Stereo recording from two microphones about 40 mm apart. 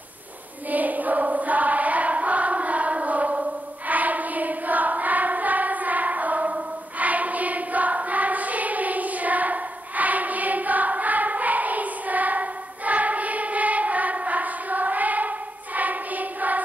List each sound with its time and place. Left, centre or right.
0.7 s choir: right